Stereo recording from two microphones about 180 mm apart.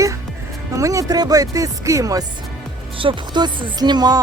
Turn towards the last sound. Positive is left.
turn(degrees=-20)  # may be behind; listen again after turning